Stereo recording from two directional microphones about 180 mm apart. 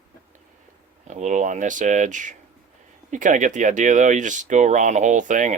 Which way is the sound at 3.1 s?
45° right (ahead or behind).